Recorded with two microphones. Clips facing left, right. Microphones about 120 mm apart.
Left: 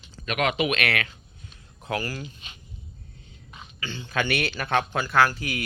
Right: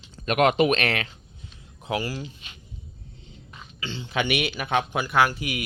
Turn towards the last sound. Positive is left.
turn(degrees=-20)  # may be behind; listen again after turning